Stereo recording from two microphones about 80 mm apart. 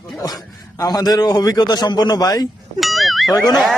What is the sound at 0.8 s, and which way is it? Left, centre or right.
A man's voice, left.